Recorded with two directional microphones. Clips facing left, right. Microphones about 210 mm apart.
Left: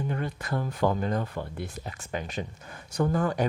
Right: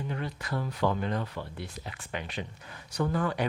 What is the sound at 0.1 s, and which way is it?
Speech, 50° left (ahead or behind).